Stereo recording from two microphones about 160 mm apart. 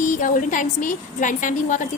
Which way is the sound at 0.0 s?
55° left (ahead or behind).